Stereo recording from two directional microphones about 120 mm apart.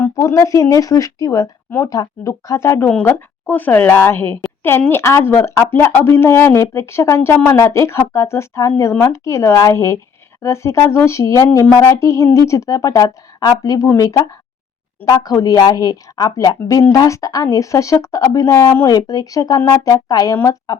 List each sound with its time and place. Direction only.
0.0 s a woman's voice: 25° left (ahead or behind)